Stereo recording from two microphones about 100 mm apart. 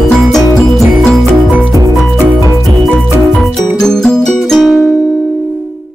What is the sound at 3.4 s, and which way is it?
Music, centre (ahead or behind).